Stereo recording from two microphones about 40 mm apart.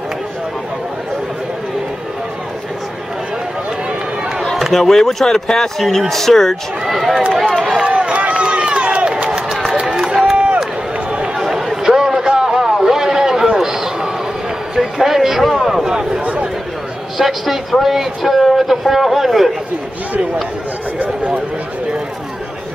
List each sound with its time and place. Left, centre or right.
4.7 s speech: centre
6.9 s speech: centre
7.6 s run: right
10.3 s crowd: right
11.3 s a sound: centre
13.6 s run: centre
14.8 s a sound: centre
17.2 s speech: centre